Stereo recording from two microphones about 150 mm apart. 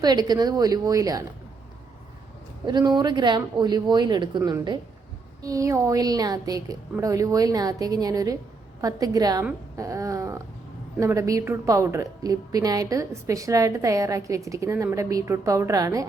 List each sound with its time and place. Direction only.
0.0 s a woman's voice: 25° right (ahead or behind)
2.6 s a woman's voice: 30° right (ahead or behind)